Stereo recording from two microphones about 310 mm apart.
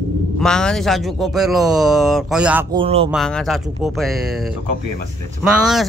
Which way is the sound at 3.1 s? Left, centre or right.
Centre.